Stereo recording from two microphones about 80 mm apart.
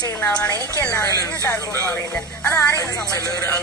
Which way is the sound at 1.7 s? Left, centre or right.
Left.